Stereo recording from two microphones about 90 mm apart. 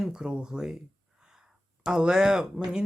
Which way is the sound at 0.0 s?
10° right (ahead or behind).